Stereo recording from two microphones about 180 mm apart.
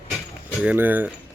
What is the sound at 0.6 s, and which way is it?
Speech, 10° right (ahead or behind).